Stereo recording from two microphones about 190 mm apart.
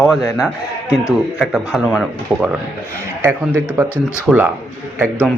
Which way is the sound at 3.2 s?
10° right (ahead or behind).